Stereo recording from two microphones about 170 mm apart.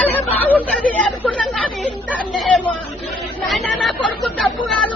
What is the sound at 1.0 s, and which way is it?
Speech, 5° left (ahead or behind).